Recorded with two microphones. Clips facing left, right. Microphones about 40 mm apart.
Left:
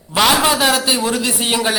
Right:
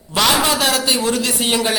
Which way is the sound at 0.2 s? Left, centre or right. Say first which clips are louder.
Left 2 dB; centre.